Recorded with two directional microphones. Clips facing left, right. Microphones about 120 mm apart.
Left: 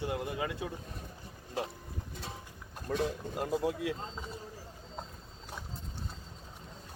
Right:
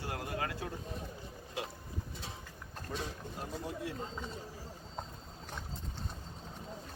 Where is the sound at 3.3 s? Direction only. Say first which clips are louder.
Left 9 dB; 90° left.